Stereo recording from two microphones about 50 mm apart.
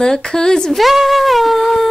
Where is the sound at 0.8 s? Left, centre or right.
Centre.